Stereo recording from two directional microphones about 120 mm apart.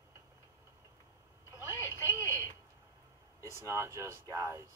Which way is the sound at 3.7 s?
25° right (ahead or behind).